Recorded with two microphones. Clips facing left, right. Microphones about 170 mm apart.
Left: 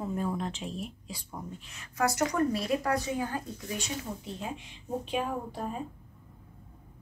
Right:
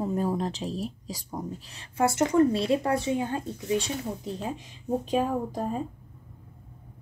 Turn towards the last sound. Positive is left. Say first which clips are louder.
# right 6 dB
turn(degrees=-40)  # may be behind; listen again after turning